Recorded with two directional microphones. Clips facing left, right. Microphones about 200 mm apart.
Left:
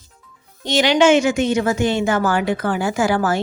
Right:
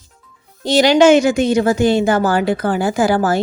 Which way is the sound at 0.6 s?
35° right (ahead or behind).